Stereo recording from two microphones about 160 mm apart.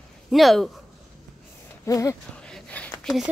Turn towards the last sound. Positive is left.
turn(degrees=10)  # may be behind; listen again after turning